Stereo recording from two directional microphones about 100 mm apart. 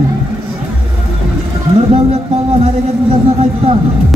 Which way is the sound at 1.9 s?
90° right.